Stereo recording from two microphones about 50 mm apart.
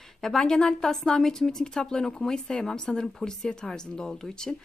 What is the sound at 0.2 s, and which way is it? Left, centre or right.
Speech, centre.